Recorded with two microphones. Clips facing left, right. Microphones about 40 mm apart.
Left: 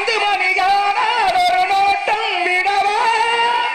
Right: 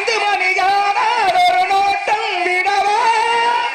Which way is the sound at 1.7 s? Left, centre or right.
Left.